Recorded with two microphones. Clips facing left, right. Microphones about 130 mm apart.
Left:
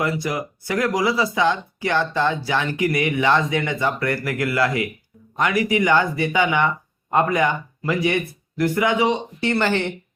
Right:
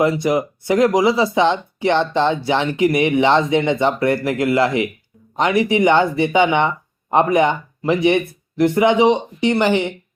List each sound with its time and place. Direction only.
0.0 s speech: 25° right (ahead or behind)